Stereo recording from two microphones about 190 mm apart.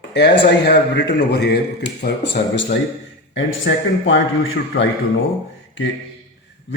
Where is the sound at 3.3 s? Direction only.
85° left.